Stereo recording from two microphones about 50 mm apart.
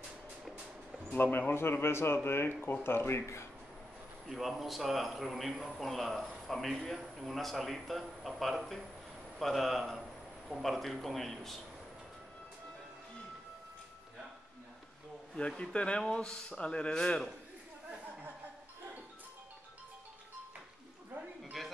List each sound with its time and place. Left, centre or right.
1.1 s a man's voice: left
4.3 s a man's voice: centre
15.3 s speech: centre
21.6 s a sound: centre